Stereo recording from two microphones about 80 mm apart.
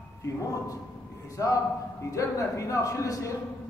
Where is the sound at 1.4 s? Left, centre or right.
Left.